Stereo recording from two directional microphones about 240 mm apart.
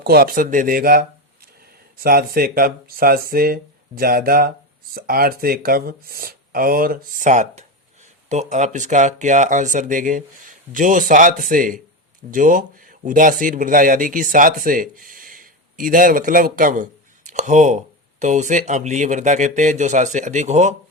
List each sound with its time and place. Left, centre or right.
0.0 s speech: right